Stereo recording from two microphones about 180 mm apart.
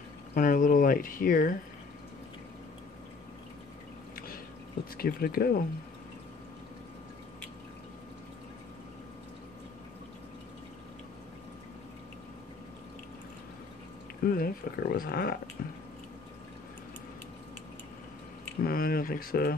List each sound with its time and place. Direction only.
0.3 s speech: 50° left (ahead or behind)
4.9 s speech: 55° left (ahead or behind)
14.2 s speech: 55° left (ahead or behind)
18.6 s speech: 55° left (ahead or behind)